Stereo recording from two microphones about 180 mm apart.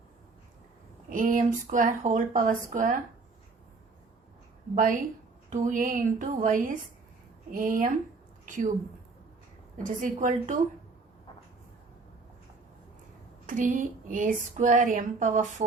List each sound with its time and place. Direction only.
1.1 s speech: 45° right (ahead or behind)
4.7 s a woman's voice: 45° right (ahead or behind)
9.7 s speech: 45° right (ahead or behind)
13.5 s speech: 45° right (ahead or behind)